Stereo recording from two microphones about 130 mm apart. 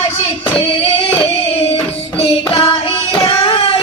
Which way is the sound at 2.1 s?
50° left (ahead or behind).